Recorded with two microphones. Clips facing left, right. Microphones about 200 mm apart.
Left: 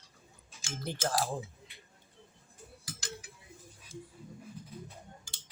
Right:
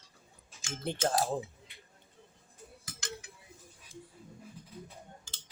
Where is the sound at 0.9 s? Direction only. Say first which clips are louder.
Right 3 dB; 25° right (ahead or behind).